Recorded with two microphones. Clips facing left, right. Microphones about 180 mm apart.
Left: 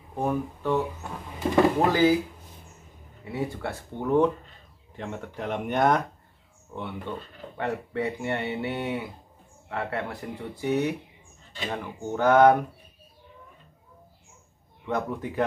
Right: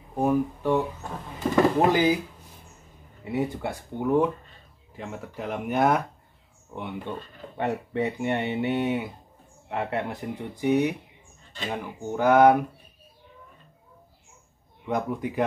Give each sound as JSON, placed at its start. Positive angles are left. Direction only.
{"t": 0.1, "sound": "speech", "side_deg": -10}
{"t": 1.9, "sound": "speech", "side_deg": -15}
{"t": 3.3, "sound": "speech", "side_deg": -20}
{"t": 14.9, "sound": "speech", "side_deg": -15}